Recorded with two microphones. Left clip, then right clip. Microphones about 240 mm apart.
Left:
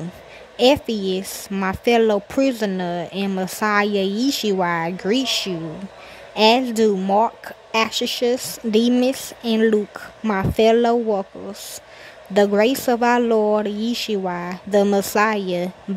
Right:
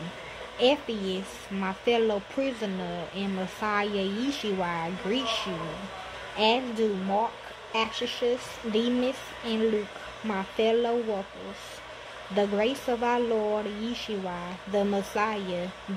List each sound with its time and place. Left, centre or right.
0.6 s speech: left
12.4 s speech: left